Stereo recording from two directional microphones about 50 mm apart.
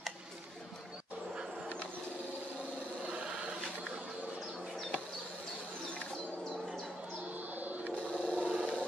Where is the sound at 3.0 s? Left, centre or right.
Centre.